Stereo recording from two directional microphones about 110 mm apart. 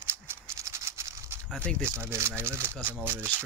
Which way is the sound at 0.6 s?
25° right (ahead or behind).